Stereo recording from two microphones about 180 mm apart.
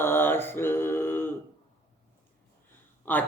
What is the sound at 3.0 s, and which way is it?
Speech, 10° left (ahead or behind).